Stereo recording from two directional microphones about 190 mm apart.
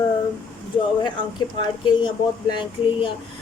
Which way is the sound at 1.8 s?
25° left (ahead or behind).